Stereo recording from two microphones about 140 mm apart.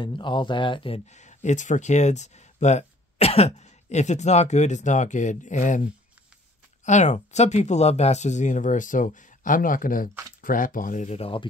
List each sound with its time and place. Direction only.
0.0 s speech: 35° left (ahead or behind); by 5.8 s 60° left (ahead or behind)
6.9 s speech: 55° left (ahead or behind)